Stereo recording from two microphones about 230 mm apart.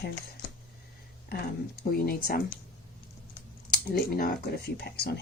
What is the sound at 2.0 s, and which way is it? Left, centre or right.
Speech, left.